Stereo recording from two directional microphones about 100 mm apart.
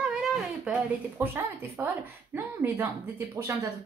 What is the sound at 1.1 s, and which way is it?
Speech, 25° right (ahead or behind).